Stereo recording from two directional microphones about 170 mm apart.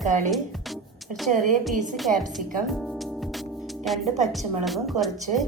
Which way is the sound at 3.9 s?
Centre (ahead or behind).